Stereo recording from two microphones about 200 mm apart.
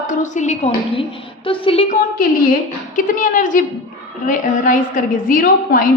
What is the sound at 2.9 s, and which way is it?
A woman's voice, 40° left (ahead or behind).